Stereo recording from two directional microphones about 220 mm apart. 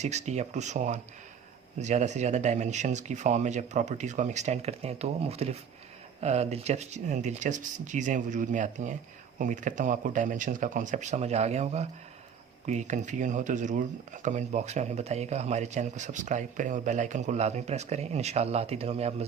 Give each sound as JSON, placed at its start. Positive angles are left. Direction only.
{"t": 0.0, "sound": "speech", "side_deg": -30}